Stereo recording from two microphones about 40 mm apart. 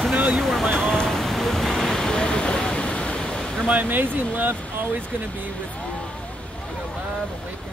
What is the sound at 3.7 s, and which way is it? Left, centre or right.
Speech, right.